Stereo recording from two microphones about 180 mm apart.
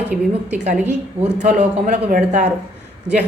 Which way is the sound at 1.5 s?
45° right (ahead or behind).